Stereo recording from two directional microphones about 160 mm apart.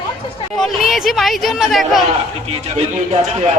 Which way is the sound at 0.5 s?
Centre (ahead or behind).